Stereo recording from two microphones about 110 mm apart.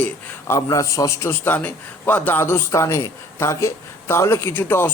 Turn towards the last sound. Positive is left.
turn(degrees=20)  # may be behind; listen again after turning